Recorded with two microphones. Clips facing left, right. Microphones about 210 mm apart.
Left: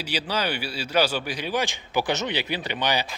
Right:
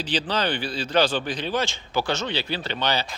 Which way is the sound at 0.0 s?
10° left (ahead or behind).